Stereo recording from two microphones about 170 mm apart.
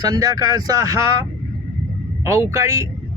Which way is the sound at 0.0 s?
20° right (ahead or behind).